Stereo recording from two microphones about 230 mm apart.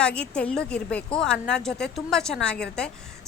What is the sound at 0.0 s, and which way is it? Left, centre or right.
A woman's voice, centre.